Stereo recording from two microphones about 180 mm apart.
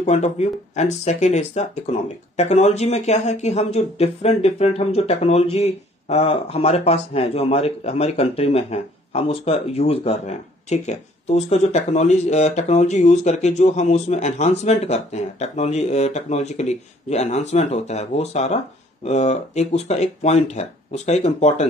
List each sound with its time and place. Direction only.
0.0 s speech: 40° left (ahead or behind)